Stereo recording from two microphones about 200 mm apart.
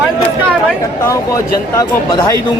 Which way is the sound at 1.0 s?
15° left (ahead or behind).